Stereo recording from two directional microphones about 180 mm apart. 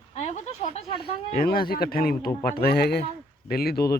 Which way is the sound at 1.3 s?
55° left (ahead or behind).